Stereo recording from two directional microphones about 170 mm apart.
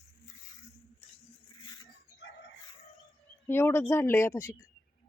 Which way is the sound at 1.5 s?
25° left (ahead or behind).